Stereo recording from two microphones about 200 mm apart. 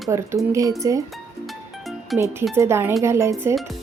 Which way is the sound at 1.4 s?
Centre (ahead or behind).